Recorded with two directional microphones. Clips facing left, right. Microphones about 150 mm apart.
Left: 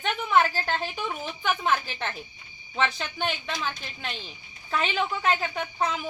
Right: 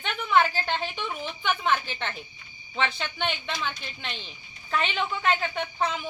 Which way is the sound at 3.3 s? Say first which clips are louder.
Even; 5° left (ahead or behind).